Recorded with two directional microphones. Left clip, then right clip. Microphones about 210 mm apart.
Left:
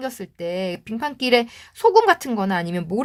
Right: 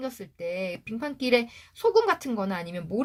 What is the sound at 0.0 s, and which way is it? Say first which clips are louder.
Speech: left 5 dB; 30° left (ahead or behind).